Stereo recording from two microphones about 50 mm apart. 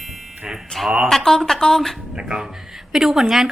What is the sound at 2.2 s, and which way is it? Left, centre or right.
A woman's voice, centre.